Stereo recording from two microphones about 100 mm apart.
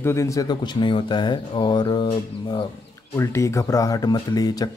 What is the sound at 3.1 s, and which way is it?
Speech, 30° left (ahead or behind).